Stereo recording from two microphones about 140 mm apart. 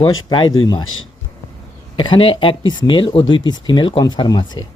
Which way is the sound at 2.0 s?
35° left (ahead or behind).